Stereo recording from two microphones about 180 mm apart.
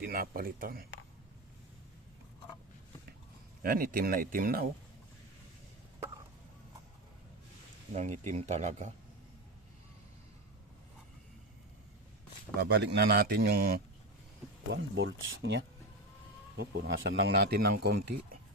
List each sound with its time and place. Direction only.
0.0 s speech: 55° right (ahead or behind)
3.6 s speech: 55° right (ahead or behind)
7.9 s speech: 40° right (ahead or behind)
12.5 s speech: 70° right (ahead or behind)
14.7 s speech: 80° right
16.6 s speech: 60° right (ahead or behind)